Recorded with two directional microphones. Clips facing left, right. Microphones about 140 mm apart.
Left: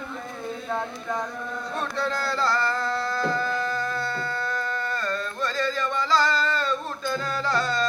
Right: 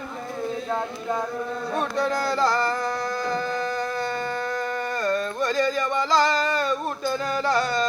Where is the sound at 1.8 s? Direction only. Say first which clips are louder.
Right 3 dB; 15° right (ahead or behind).